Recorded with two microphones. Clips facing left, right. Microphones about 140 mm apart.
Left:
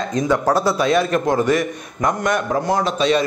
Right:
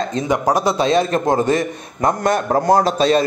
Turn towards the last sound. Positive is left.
turn(degrees=-35)  # may be behind; listen again after turning